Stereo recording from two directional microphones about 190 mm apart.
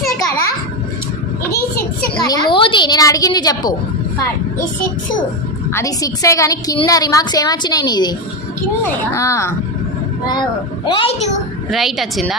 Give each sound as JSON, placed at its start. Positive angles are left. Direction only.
{"t": 2.2, "sound": "a woman's voice", "side_deg": 25}
{"t": 5.7, "sound": "a woman's voice", "side_deg": 15}
{"t": 10.8, "sound": "a woman's voice", "side_deg": 30}
{"t": 11.7, "sound": "a woman's voice", "side_deg": 0}